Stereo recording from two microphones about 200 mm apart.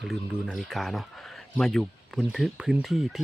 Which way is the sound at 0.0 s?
Centre (ahead or behind).